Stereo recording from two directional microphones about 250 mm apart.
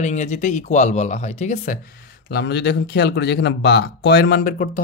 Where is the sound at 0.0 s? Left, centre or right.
Left.